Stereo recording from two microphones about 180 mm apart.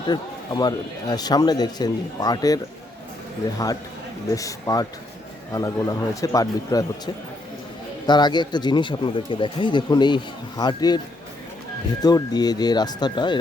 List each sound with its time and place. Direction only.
0.1 s a man's voice: 20° left (ahead or behind)
12.0 s a man's voice: 20° left (ahead or behind)